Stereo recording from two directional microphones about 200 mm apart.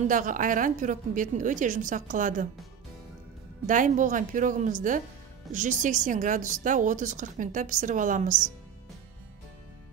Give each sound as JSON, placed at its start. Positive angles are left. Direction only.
{"t": 0.1, "sound": "a woman's voice", "side_deg": -40}
{"t": 3.6, "sound": "a woman's voice", "side_deg": -40}